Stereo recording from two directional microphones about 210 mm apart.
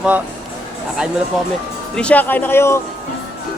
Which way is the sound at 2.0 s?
5° left (ahead or behind).